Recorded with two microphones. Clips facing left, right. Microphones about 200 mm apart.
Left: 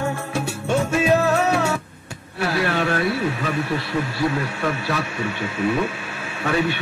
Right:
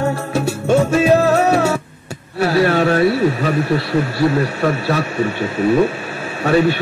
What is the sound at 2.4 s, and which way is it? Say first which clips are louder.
A man's voice: right 7 dB; 40° right (ahead or behind).